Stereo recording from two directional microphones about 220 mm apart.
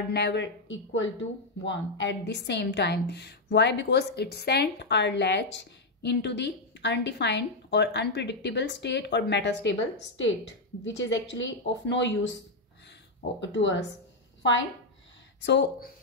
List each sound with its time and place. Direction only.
0.1 s a woman's voice: 50° left (ahead or behind)
13.4 s speech: 55° left (ahead or behind)